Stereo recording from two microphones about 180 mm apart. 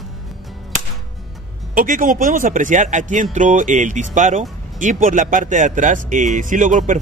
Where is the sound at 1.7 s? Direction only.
50° right (ahead or behind).